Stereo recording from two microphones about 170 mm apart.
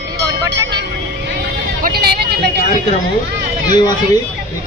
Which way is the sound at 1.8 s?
65° right (ahead or behind).